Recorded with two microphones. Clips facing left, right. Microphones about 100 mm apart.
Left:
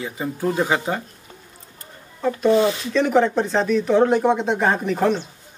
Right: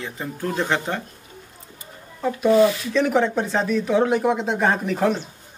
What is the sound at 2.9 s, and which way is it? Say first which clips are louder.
Speech: left 2 dB; centre (ahead or behind).